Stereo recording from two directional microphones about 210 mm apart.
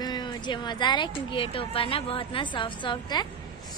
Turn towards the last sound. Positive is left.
turn(degrees=20)  # may be behind; listen again after turning